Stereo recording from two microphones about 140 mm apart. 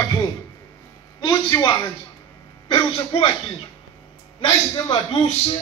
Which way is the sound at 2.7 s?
35° left (ahead or behind).